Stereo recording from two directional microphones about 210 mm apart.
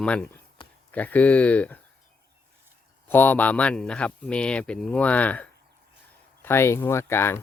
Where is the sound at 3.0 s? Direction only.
10° left (ahead or behind).